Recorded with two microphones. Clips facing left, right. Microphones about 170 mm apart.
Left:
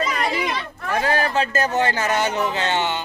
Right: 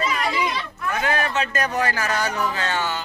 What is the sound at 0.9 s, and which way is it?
Speech, 35° left (ahead or behind).